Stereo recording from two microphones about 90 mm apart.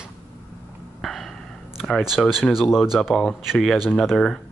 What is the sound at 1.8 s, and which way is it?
Speech, centre (ahead or behind).